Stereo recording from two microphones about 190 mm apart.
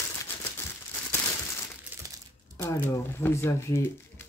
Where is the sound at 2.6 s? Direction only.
15° left (ahead or behind).